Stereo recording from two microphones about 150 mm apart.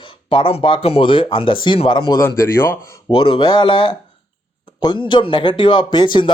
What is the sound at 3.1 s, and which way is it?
Speech, 35° left (ahead or behind).